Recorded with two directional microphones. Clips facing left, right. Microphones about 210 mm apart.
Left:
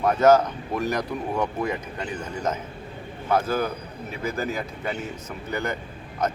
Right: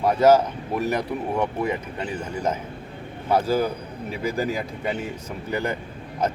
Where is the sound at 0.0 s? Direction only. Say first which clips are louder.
Right 1 dB; 10° right (ahead or behind).